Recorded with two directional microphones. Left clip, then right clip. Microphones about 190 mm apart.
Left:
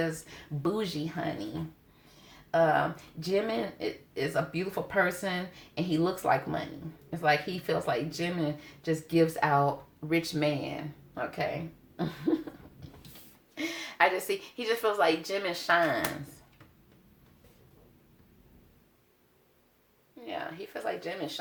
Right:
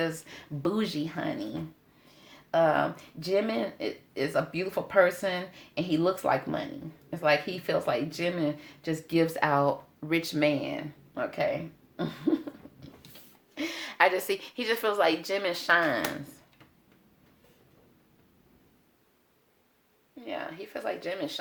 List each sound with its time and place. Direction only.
0.0 s speech: 35° right (ahead or behind)
2.5 s speech: 35° right (ahead or behind)
13.6 s speech: 40° right (ahead or behind)
20.2 s speech: 35° right (ahead or behind)